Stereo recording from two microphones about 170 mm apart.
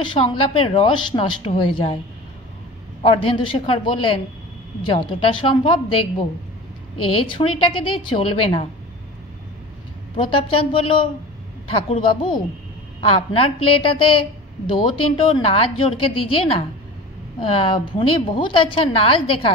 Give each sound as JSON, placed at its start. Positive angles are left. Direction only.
{"t": 0.0, "sound": "a woman's voice", "side_deg": 30}
{"t": 3.0, "sound": "a woman's voice", "side_deg": 30}
{"t": 10.1, "sound": "a woman's voice", "side_deg": 30}